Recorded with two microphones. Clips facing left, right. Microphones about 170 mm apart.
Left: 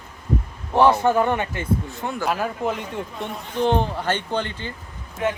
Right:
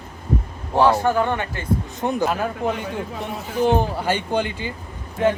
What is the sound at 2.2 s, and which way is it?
Speech, centre (ahead or behind).